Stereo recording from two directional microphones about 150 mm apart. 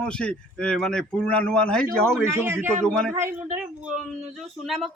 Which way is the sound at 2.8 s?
5° left (ahead or behind).